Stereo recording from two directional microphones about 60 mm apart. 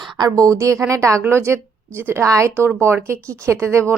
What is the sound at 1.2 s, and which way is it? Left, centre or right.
Speech, right.